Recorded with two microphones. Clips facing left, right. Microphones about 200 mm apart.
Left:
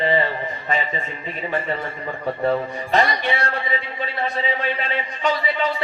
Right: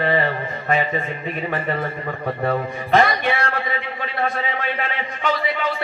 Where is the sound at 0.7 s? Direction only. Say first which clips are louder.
Right 4 dB; 55° right (ahead or behind).